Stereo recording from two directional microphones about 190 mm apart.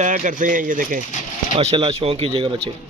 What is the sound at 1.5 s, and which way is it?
Speech, 30° right (ahead or behind).